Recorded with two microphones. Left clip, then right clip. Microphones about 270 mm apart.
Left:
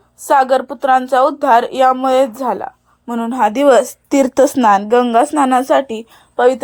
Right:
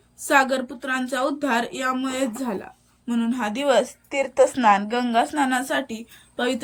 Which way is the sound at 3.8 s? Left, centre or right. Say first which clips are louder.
Left 10 dB; left.